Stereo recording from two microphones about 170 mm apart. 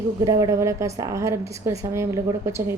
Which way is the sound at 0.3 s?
20° right (ahead or behind).